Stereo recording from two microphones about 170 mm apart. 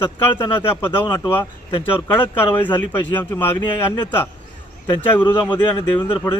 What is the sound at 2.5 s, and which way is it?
Speech, 10° left (ahead or behind).